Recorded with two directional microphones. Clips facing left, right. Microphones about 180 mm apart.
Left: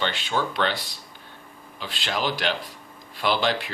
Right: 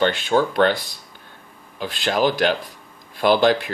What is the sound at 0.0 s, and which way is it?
Speech, 50° right (ahead or behind).